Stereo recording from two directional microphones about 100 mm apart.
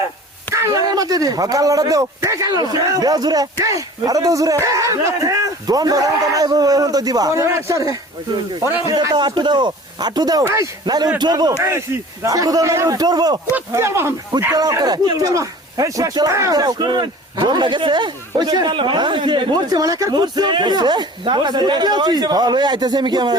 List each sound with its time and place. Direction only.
0.5 s speech: 35° right (ahead or behind)
10.4 s speech: 25° right (ahead or behind)
10.8 s speech: 40° right (ahead or behind)
13.7 s speech: 30° right (ahead or behind)
14.5 s speech: 35° right (ahead or behind)